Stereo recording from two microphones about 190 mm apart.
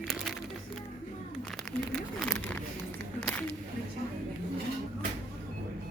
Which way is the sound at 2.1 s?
10° left (ahead or behind).